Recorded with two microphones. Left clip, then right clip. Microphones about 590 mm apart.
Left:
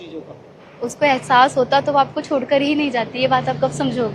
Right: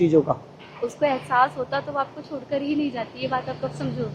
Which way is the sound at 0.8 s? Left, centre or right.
Left.